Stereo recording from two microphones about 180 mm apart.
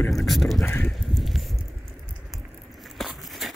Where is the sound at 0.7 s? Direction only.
10° left (ahead or behind).